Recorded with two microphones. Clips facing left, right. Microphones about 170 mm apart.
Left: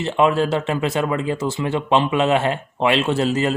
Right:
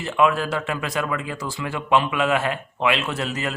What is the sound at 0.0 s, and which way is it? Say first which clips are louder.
Speech: left 3 dB; 25° left (ahead or behind).